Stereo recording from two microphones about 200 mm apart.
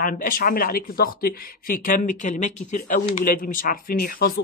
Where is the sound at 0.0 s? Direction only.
45° left (ahead or behind).